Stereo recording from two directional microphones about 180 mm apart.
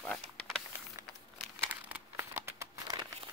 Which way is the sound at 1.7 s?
10° right (ahead or behind).